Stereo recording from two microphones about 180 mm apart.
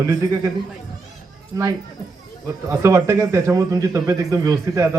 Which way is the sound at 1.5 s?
20° right (ahead or behind).